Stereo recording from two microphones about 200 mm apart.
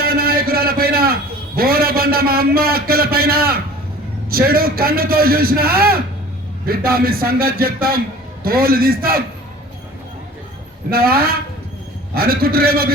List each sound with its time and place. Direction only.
0.0 s a sound: 50° right (ahead or behind)
4.3 s a man's voice: 50° right (ahead or behind)
10.9 s a man's voice: 50° right (ahead or behind)